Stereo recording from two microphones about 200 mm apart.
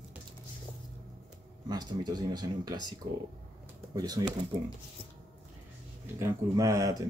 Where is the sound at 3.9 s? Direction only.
20° right (ahead or behind).